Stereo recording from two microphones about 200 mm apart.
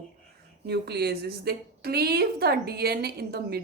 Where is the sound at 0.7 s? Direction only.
55° right (ahead or behind).